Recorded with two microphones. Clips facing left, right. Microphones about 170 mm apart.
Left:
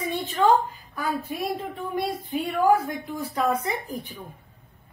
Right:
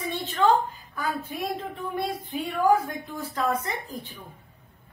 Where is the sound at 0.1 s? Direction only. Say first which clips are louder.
Left 1 dB; 10° left (ahead or behind).